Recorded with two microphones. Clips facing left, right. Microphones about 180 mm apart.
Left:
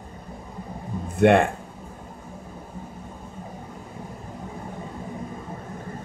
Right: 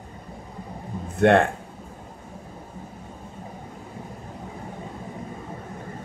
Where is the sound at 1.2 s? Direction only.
10° left (ahead or behind).